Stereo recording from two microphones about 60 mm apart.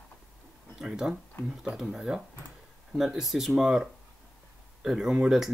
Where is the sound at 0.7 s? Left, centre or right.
Centre.